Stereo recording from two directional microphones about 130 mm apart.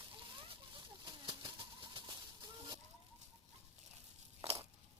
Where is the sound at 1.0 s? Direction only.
35° right (ahead or behind).